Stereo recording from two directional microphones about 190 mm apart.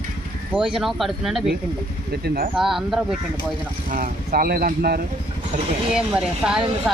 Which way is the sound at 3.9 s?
50° right (ahead or behind).